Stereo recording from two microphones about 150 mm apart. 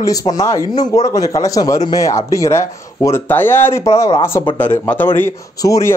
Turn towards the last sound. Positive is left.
turn(degrees=20)  # may be behind; listen again after turning